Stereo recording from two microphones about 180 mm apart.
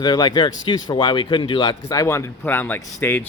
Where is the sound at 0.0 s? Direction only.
25° left (ahead or behind).